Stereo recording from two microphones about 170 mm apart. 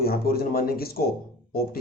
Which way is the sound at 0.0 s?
60° left (ahead or behind).